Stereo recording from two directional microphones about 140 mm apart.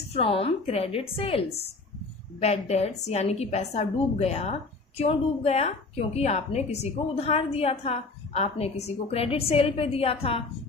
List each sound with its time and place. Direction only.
0.1 s a woman's voice: 45° left (ahead or behind)